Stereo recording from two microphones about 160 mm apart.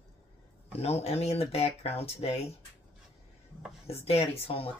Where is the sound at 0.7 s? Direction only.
40° left (ahead or behind).